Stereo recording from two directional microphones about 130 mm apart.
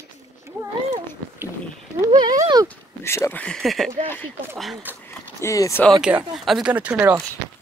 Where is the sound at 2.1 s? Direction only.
30° right (ahead or behind).